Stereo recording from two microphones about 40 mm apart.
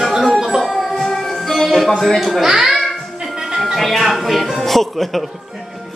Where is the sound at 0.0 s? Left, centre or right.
Centre.